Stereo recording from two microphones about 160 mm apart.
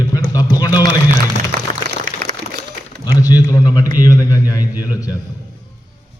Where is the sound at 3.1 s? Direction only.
20° left (ahead or behind).